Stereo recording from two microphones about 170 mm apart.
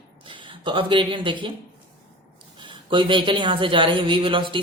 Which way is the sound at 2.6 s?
30° right (ahead or behind).